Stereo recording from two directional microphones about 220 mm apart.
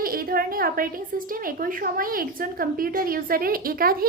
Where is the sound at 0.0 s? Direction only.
40° right (ahead or behind).